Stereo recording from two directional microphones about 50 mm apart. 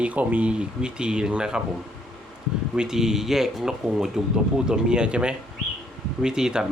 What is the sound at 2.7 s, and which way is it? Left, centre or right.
Speech, centre.